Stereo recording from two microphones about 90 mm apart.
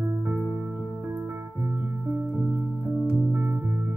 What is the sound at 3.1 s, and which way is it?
Music, 20° right (ahead or behind).